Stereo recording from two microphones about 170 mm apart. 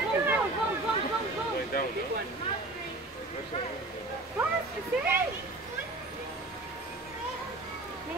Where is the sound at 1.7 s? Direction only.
60° left (ahead or behind).